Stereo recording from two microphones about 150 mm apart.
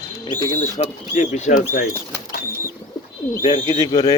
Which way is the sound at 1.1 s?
55° left (ahead or behind).